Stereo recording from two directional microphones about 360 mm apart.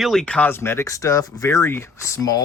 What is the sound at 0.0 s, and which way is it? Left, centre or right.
Speech, centre.